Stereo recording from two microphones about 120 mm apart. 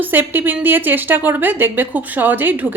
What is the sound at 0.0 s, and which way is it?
Speech, 15° right (ahead or behind).